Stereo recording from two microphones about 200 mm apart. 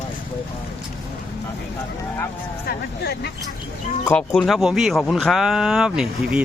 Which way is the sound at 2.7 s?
55° left (ahead or behind).